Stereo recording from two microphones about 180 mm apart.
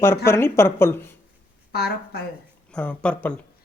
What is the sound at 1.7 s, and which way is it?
Speech, 60° left (ahead or behind).